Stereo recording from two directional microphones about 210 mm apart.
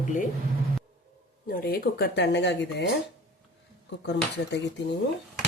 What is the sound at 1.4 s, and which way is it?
Speech, 45° left (ahead or behind).